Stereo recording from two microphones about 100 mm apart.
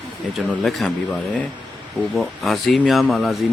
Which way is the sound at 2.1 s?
5° left (ahead or behind).